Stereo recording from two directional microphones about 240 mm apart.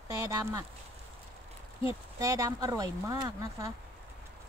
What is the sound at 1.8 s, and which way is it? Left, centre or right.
Speech, centre.